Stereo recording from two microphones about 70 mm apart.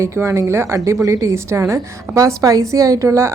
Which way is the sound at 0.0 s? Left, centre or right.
Right.